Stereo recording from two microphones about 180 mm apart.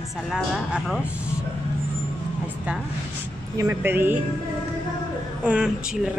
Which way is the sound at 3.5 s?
15° right (ahead or behind).